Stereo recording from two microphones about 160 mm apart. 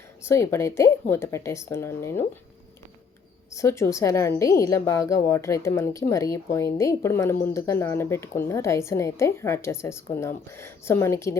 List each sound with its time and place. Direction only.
0.3 s a woman's voice: 15° left (ahead or behind)
3.5 s a woman's voice: 20° left (ahead or behind)